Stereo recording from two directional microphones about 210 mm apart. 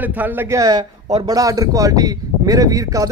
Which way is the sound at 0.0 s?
10° right (ahead or behind).